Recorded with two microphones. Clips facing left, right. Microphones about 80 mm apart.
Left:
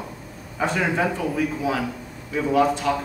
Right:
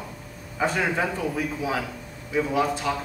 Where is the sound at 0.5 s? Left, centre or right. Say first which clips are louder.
Left 1 dB; centre.